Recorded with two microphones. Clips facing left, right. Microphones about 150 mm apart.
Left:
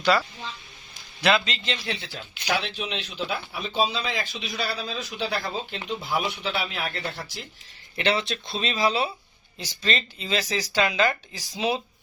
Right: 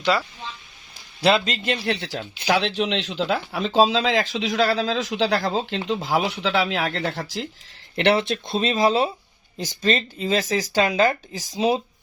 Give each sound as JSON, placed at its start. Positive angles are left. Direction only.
{"t": 1.5, "sound": "speech", "side_deg": -50}
{"t": 2.6, "sound": "speech", "side_deg": -90}
{"t": 7.9, "sound": "speech", "side_deg": -60}